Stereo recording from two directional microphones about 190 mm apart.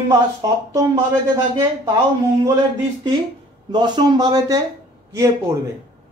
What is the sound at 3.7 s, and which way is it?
Speech, 25° right (ahead or behind).